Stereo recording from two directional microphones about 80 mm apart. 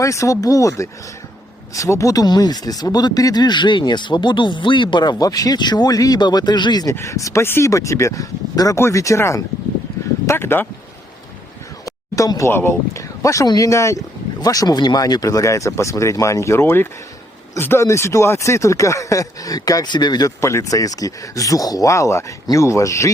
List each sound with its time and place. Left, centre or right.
0.0 s speech: left
2.2 s speech: left
6.9 s speech: left
12.1 s speech: left
12.5 s speech: left
14.4 s speech: left
20.4 s speech: left